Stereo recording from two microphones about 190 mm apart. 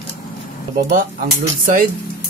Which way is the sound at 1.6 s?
45° right (ahead or behind).